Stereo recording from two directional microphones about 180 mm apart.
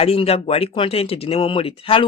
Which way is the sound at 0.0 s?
35° left (ahead or behind).